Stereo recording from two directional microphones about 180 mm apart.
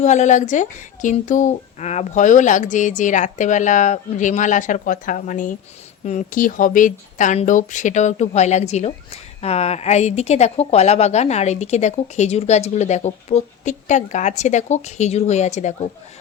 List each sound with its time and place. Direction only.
0.0 s a woman's voice: 40° left (ahead or behind)